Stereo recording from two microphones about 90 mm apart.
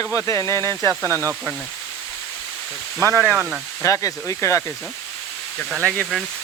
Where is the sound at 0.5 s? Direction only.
40° right (ahead or behind).